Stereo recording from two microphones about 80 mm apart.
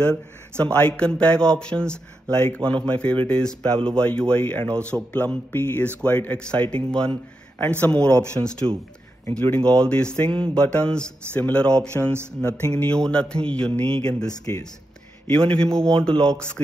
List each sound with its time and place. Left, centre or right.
0.0 s speech: centre
9.3 s speech: centre
15.4 s speech: centre